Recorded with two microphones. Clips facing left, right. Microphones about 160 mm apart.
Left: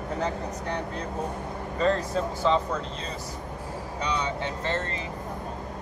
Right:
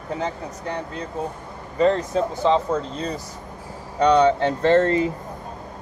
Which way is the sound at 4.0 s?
65° right (ahead or behind).